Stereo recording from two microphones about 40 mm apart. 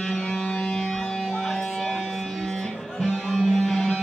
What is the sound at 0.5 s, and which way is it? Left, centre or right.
Music, left.